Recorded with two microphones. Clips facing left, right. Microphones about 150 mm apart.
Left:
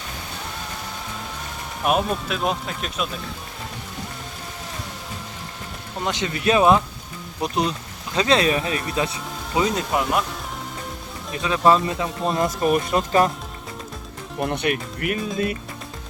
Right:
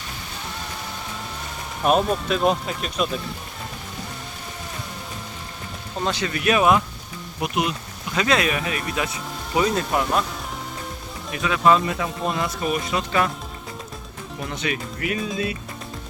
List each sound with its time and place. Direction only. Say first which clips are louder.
1.8 s speech: right 2 dB; 5° left (ahead or behind)
6.1 s speech: left 1 dB; 20° left (ahead or behind)
9.6 s speech: even; 20° left (ahead or behind)
11.3 s speech: left 1 dB; 30° left (ahead or behind)
12.3 s speech: left 7 dB; 45° left (ahead or behind)
14.3 s speech: left 5 dB; 60° left (ahead or behind)